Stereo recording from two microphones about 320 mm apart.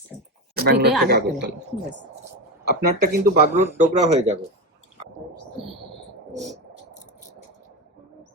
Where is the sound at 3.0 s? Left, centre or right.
Right.